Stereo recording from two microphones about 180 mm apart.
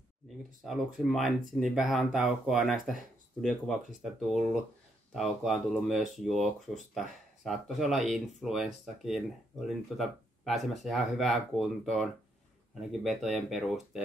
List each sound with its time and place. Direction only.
0.7 s speech: centre (ahead or behind)